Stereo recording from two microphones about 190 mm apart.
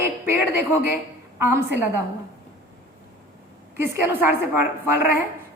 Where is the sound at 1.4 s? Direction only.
10° right (ahead or behind).